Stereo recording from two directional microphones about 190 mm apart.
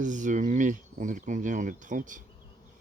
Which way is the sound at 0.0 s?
40° right (ahead or behind).